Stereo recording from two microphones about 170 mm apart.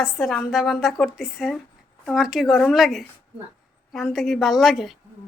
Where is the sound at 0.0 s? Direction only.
Centre (ahead or behind).